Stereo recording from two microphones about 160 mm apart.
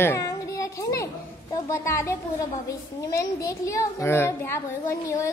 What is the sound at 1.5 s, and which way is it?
A woman's voice, 20° left (ahead or behind).